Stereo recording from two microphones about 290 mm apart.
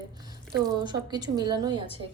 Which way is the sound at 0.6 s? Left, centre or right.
Centre.